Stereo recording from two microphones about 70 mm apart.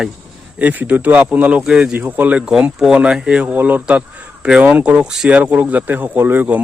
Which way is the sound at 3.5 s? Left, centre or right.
Right.